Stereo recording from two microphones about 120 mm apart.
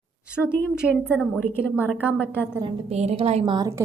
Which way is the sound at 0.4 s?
Centre (ahead or behind).